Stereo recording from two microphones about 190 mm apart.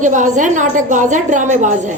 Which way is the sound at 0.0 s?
40° right (ahead or behind).